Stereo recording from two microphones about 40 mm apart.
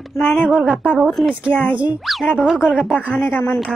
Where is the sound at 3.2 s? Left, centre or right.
Left.